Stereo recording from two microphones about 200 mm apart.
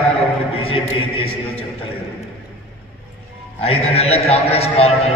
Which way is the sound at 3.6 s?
30° left (ahead or behind).